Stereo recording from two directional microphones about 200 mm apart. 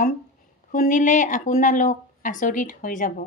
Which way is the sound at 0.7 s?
40° left (ahead or behind).